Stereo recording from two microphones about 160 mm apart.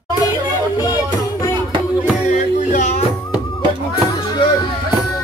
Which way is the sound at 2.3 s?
45° left (ahead or behind).